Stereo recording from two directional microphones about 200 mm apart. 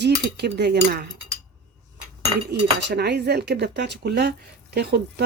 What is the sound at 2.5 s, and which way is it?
Speech, 55° right (ahead or behind).